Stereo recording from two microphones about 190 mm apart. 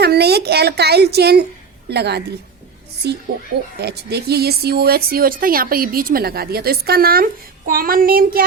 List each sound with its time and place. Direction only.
0.0 s a woman's voice: 60° right (ahead or behind)